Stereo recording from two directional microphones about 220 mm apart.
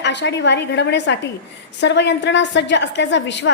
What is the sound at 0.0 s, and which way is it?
A woman's voice, 50° left (ahead or behind).